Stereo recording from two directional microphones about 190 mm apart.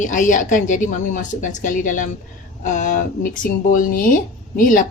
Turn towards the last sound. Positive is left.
turn(degrees=45)  # may be behind; listen again after turning